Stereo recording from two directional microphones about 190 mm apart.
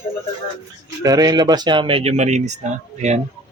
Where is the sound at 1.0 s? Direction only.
20° right (ahead or behind); by 3.2 s 35° right (ahead or behind).